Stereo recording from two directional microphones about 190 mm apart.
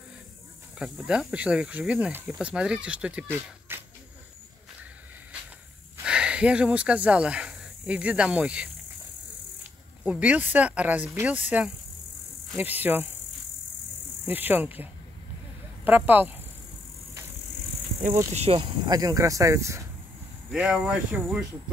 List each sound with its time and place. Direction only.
0.7 s speech: 5° right (ahead or behind)
3.4 s a sound: 10° right (ahead or behind)
6.0 s speech: 5° right (ahead or behind)
14.2 s speech: 10° right (ahead or behind)
18.0 s speech: 35° right (ahead or behind); by 19.8 s 15° right (ahead or behind)
20.5 s speech: 5° right (ahead or behind)